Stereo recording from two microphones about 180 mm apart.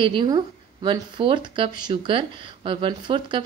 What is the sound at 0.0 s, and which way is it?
Speech, 25° right (ahead or behind).